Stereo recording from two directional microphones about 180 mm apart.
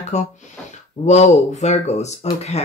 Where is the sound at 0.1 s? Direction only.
40° left (ahead or behind).